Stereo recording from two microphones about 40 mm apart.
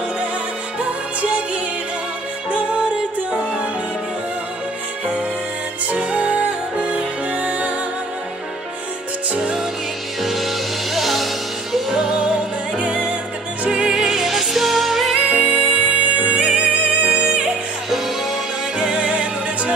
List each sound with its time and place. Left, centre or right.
0.7 s music: right
6.0 s music: right
10.2 s music: centre
12.7 s music: right
13.7 s music: centre
14.0 s music: centre
15.8 s music: right
17.8 s music: centre
18.8 s music: right